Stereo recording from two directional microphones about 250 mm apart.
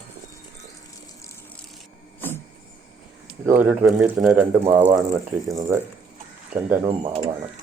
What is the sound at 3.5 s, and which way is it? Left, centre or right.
Speech, centre.